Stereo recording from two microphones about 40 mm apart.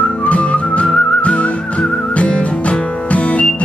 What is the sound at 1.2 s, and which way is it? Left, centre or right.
Music, left.